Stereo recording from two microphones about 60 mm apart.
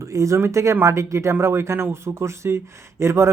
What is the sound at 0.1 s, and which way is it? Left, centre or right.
Speech, right.